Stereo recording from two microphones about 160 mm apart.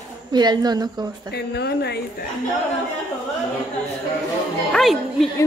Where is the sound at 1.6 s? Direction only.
90° left.